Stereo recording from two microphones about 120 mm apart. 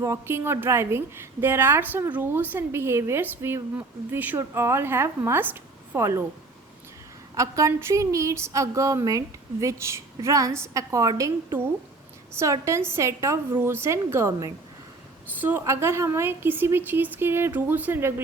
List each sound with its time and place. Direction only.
0.0 s a woman's voice: 25° right (ahead or behind)
7.3 s a woman's voice: 25° right (ahead or behind)
12.4 s a woman's voice: 25° right (ahead or behind)